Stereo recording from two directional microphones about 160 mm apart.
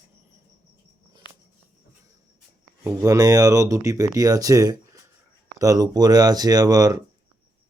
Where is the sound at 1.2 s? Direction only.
30° left (ahead or behind).